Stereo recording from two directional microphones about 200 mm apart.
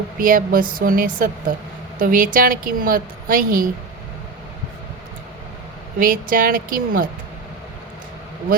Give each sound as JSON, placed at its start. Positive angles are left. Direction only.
{"t": 0.2, "sound": "a woman's voice", "side_deg": -45}
{"t": 6.0, "sound": "a woman's voice", "side_deg": -45}